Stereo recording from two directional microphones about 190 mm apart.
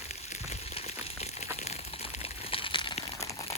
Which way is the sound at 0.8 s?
35° left (ahead or behind).